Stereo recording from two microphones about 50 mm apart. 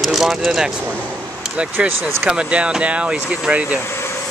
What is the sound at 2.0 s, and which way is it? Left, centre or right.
Speech, right.